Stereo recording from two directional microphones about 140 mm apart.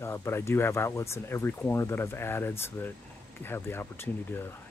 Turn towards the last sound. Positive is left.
turn(degrees=15)  # may be behind; listen again after turning